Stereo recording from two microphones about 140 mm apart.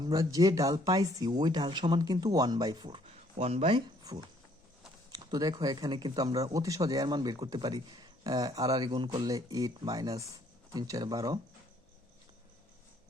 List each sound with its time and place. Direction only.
0.0 s speech: 25° right (ahead or behind)
3.1 s speech: 45° right (ahead or behind)
5.1 s speech: 30° right (ahead or behind)